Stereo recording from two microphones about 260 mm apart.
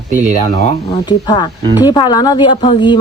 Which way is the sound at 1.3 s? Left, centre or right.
Centre.